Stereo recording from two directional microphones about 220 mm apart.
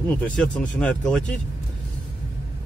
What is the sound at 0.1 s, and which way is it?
Speech, 5° left (ahead or behind).